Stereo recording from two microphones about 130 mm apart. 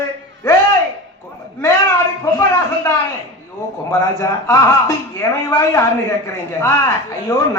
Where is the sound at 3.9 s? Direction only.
25° left (ahead or behind).